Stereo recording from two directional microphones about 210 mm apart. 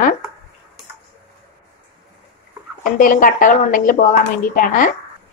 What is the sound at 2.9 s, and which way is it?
Speech, 40° left (ahead or behind).